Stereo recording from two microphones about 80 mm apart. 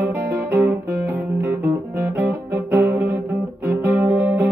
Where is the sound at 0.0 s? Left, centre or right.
Right.